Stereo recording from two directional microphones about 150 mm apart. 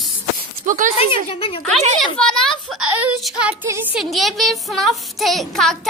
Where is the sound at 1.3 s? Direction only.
40° left (ahead or behind).